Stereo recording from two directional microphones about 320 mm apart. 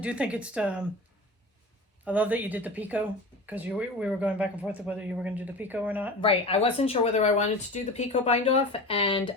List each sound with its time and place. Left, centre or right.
0.0 s speech: centre
2.0 s speech: centre
6.2 s speech: centre